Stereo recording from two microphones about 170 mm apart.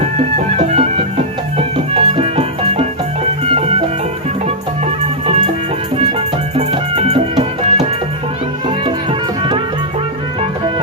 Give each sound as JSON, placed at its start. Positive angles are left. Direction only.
{"t": 0.5, "sound": "music", "side_deg": -35}
{"t": 6.0, "sound": "music", "side_deg": -35}